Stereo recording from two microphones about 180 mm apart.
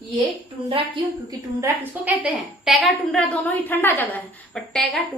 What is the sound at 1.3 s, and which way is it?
A woman's voice, 10° right (ahead or behind).